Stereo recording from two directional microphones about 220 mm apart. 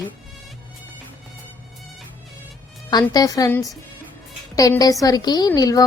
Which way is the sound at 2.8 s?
20° left (ahead or behind).